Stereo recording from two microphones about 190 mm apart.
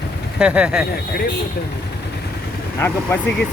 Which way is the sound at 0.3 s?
5° right (ahead or behind).